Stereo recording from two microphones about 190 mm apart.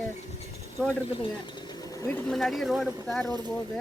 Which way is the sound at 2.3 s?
Centre (ahead or behind).